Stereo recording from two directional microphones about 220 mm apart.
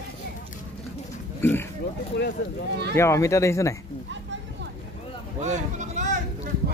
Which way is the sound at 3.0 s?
15° left (ahead or behind).